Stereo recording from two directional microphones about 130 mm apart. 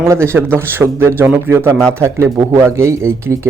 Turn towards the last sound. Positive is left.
turn(degrees=-20)  # may be behind; listen again after turning